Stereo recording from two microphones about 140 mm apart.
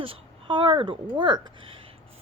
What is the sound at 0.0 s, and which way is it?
A child's voice, 40° right (ahead or behind).